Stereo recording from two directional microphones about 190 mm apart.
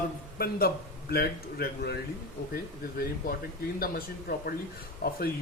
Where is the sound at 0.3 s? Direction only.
55° left (ahead or behind).